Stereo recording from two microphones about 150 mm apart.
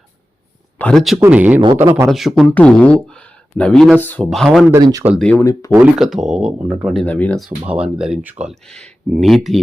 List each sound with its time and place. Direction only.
0.8 s speech: 5° left (ahead or behind)
1.2 s speech: 10° right (ahead or behind)
4.7 s speech: 25° right (ahead or behind)
5.4 s speech: 20° left (ahead or behind)
5.8 s speech: centre (ahead or behind)
7.0 s speech: 10° left (ahead or behind)
7.6 s speech: 10° right (ahead or behind)
8.6 s speech: 5° left (ahead or behind)